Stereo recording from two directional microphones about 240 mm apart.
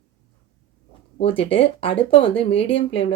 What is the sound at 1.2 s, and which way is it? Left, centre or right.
Speech, left.